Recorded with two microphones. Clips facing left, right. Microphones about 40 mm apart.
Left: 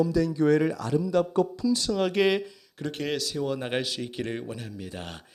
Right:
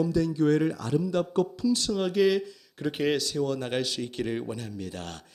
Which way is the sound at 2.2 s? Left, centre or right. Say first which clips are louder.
Right 1 dB; left.